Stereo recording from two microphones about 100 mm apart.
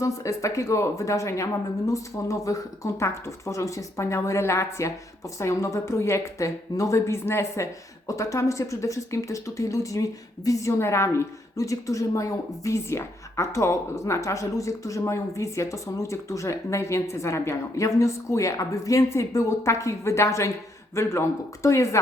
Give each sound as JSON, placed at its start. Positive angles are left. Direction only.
{"t": 0.0, "sound": "a woman's voice", "side_deg": 35}